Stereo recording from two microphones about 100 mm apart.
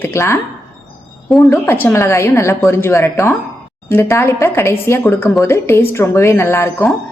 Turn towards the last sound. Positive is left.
turn(degrees=25)  # may be behind; listen again after turning